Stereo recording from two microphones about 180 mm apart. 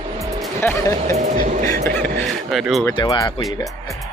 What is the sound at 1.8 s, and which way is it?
Music, 10° left (ahead or behind).